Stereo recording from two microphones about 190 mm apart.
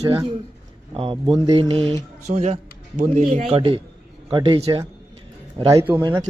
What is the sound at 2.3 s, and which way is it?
Speech, 40° right (ahead or behind).